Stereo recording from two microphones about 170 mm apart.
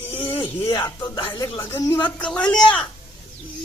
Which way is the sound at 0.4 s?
20° left (ahead or behind).